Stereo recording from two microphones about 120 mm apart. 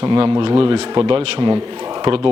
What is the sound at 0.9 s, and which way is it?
Speech, 30° right (ahead or behind).